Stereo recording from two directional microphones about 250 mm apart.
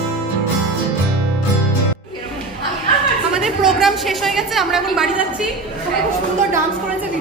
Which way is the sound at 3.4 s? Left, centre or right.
Centre.